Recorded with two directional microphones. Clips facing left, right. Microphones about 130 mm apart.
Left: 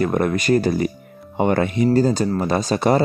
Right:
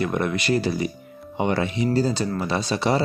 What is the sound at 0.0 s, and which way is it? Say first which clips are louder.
Speech: left 4 dB; 45° left (ahead or behind).